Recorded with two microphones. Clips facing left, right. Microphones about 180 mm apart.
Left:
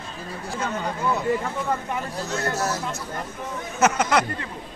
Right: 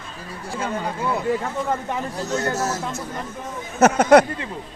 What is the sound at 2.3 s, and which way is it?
Speech, 40° right (ahead or behind).